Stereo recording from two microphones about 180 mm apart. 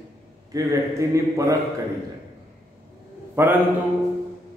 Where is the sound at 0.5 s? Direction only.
20° right (ahead or behind).